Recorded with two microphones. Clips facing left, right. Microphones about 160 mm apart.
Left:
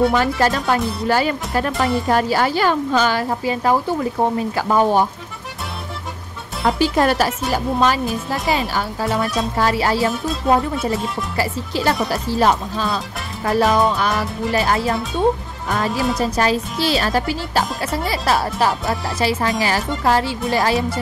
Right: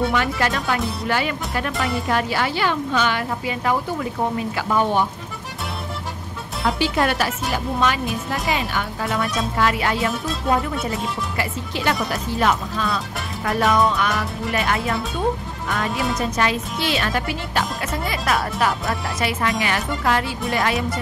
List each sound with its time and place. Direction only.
0.1 s speech: 35° left (ahead or behind)
6.6 s speech: 40° left (ahead or behind)
11.3 s speech: 35° left (ahead or behind)
15.9 s a woman's voice: centre (ahead or behind)
16.2 s speech: 35° left (ahead or behind)